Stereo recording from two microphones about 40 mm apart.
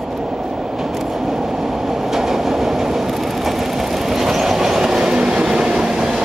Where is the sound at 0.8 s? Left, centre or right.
Centre.